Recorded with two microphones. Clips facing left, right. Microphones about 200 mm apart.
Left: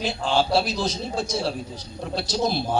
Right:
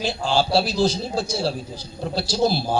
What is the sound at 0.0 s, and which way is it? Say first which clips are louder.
A man's voice: right 1 dB; 30° right (ahead or behind).